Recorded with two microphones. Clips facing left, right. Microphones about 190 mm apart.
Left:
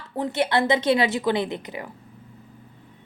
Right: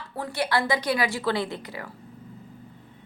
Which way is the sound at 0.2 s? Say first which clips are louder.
Left 4 dB; 20° left (ahead or behind).